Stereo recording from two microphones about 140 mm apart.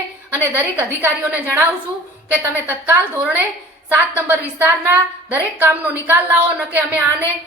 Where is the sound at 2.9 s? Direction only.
15° right (ahead or behind).